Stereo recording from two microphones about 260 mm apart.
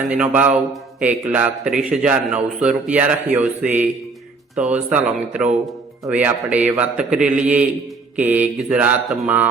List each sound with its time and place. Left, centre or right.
0.1 s a man's voice: centre
8.3 s mantra: centre